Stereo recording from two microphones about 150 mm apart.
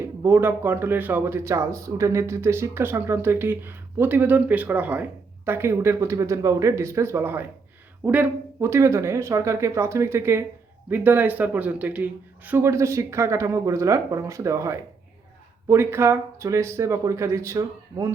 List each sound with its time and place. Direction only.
0.2 s speech: 15° right (ahead or behind)